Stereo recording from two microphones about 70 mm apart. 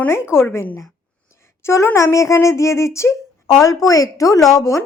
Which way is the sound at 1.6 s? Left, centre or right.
Left.